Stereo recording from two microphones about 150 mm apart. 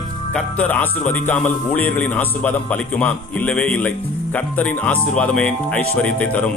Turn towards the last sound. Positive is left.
turn(degrees=10)  # may be behind; listen again after turning